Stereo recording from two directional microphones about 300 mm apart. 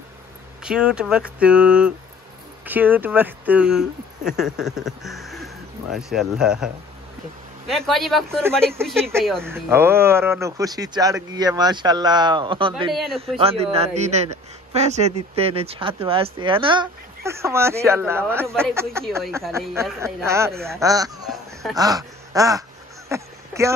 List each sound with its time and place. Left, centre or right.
0.7 s speech: centre
12.9 s speech: centre
13.4 s a man's voice: centre
20.5 s speech: centre
20.8 s speech: centre
23.0 s a sound: centre